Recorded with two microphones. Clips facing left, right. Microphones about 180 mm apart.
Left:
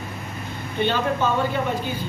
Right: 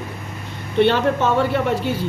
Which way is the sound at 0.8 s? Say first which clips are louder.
Right 6 dB; 75° right (ahead or behind).